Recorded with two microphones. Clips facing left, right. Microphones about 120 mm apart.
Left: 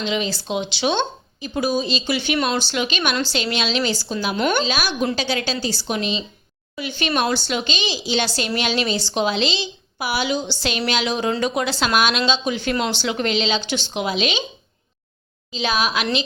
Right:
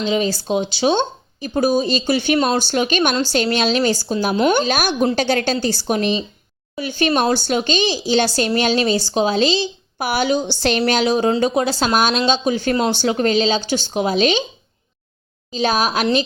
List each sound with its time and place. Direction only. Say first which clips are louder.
0.0 s a woman's voice: right 5 dB; 40° right (ahead or behind)
2.6 s a woman's voice: right 5 dB; 50° right (ahead or behind)
4.6 s a woman's voice: right 4 dB; 50° right (ahead or behind)
15.5 s a woman's voice: right 4 dB; 40° right (ahead or behind)